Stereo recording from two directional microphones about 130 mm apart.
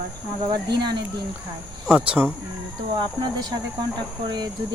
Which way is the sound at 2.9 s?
35° right (ahead or behind).